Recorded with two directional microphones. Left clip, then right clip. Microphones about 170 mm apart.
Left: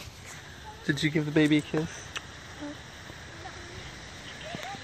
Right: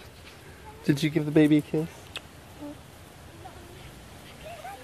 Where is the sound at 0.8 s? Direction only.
60° right (ahead or behind).